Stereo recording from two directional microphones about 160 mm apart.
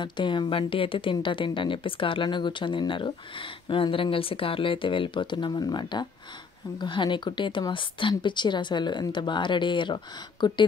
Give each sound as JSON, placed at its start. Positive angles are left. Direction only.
{"t": 0.0, "sound": "speech", "side_deg": 30}